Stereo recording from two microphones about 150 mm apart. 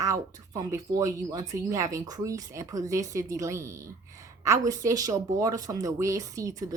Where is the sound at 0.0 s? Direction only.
20° right (ahead or behind).